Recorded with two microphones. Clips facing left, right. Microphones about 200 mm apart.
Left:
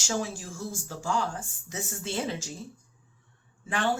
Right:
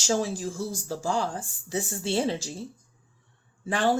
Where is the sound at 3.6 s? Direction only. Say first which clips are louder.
Right 3 dB; 35° right (ahead or behind).